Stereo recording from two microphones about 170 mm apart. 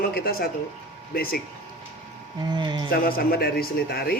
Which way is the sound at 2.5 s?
25° right (ahead or behind).